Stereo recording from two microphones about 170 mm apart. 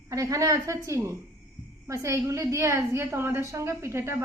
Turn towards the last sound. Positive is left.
turn(degrees=-15)  # may be behind; listen again after turning